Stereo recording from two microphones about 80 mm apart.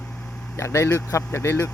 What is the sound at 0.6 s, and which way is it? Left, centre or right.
Speech, left.